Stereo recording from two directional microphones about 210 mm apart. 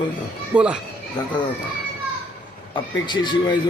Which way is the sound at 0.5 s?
5° right (ahead or behind).